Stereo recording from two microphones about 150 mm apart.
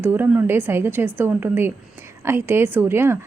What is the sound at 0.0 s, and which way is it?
A woman's voice, 15° right (ahead or behind).